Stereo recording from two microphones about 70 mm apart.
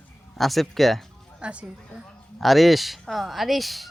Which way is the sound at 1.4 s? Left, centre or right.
Centre.